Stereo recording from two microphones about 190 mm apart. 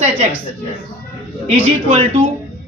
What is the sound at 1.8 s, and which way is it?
Speech, 30° right (ahead or behind).